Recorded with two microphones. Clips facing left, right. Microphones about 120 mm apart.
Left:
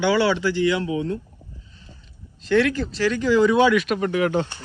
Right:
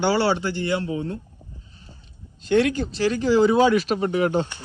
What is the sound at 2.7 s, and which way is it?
Speech, 35° right (ahead or behind).